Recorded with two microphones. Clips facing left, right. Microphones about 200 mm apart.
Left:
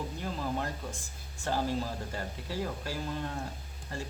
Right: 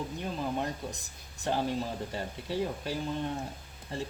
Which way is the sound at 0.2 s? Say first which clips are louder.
Right 2 dB; 20° right (ahead or behind).